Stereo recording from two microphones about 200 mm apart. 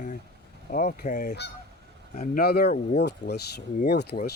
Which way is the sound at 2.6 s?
35° left (ahead or behind).